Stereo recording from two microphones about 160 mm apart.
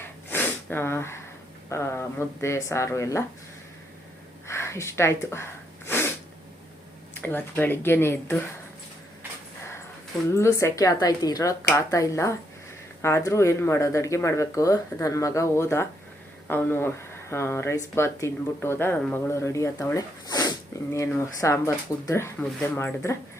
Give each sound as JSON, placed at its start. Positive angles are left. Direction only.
{"t": 0.3, "sound": "sneeze", "side_deg": 10}
{"t": 1.7, "sound": "speech", "side_deg": 15}
{"t": 4.4, "sound": "snort", "side_deg": 15}
{"t": 7.1, "sound": "speech", "side_deg": 10}
{"t": 10.3, "sound": "a woman's voice", "side_deg": 20}